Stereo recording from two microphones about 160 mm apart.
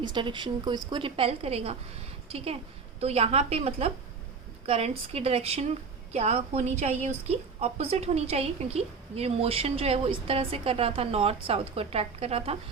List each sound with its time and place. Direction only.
0.0 s a woman's voice: 30° right (ahead or behind)